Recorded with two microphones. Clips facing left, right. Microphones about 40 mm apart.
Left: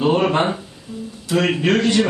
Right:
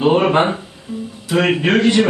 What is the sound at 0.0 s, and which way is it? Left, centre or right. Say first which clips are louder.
A man's voice: right 3 dB; centre.